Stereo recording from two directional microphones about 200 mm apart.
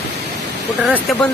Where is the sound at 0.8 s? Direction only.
5° left (ahead or behind).